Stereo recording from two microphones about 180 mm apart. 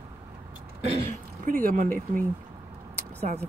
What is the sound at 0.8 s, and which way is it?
Speech, 40° right (ahead or behind).